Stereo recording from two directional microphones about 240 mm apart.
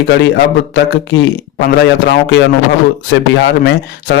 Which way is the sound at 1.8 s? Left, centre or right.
Left.